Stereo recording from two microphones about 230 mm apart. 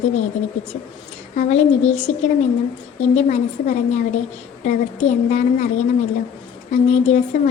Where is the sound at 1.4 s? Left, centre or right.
Left.